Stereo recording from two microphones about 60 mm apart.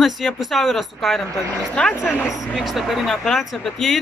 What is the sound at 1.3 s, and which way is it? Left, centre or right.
Speech, right.